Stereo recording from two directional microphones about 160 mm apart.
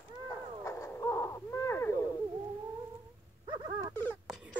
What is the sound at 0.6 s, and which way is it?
Owl, 20° left (ahead or behind).